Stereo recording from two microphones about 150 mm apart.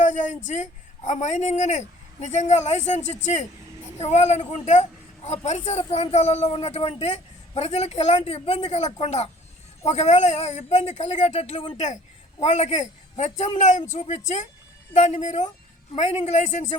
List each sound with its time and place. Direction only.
0.0 s speech: 55° left (ahead or behind)